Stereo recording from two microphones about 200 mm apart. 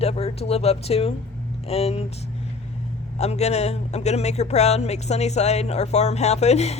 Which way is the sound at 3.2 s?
35° left (ahead or behind).